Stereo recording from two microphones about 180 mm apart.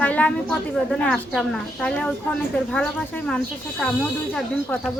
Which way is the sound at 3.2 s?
5° left (ahead or behind).